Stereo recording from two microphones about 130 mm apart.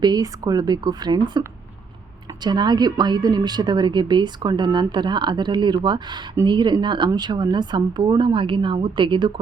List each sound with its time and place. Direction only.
0.0 s speech: 30° right (ahead or behind)